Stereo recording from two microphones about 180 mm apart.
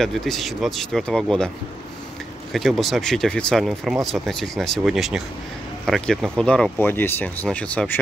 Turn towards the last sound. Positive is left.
turn(degrees=10)  # may be behind; listen again after turning